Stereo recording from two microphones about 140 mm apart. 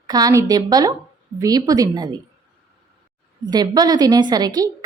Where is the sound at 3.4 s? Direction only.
30° right (ahead or behind).